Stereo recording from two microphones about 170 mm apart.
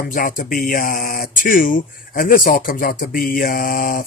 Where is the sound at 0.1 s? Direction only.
55° left (ahead or behind).